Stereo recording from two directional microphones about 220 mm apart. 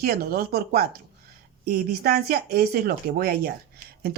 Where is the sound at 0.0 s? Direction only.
45° right (ahead or behind).